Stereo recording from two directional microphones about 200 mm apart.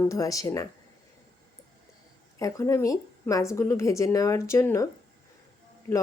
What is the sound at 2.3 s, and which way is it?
Speech, 15° left (ahead or behind).